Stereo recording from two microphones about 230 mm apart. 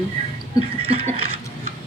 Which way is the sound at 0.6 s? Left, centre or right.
Right.